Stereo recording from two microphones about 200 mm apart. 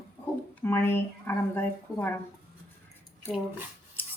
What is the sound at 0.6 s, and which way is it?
Speech, 10° left (ahead or behind).